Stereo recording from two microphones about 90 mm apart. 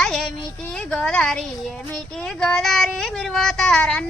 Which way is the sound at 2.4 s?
5° left (ahead or behind).